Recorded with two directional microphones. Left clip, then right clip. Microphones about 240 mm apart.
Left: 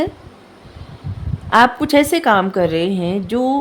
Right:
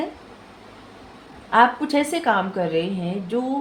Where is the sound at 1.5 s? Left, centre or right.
Left.